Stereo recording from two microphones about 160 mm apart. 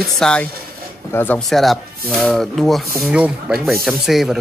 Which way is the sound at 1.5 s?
Centre (ahead or behind).